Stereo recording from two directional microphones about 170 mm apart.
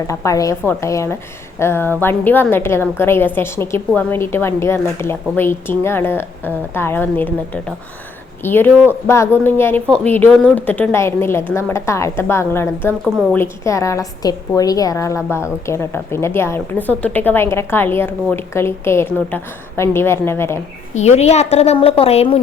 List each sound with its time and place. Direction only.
0.1 s a woman's voice: 20° left (ahead or behind)
20.9 s a woman's voice: 40° left (ahead or behind)